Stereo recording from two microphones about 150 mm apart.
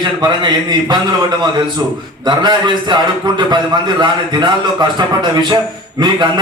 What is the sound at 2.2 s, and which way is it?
A man's voice, 30° right (ahead or behind).